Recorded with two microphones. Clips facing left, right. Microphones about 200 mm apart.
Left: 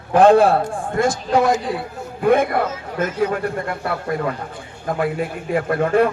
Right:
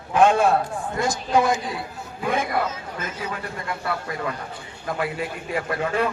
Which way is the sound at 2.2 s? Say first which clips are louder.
Left 8 dB; 55° left (ahead or behind).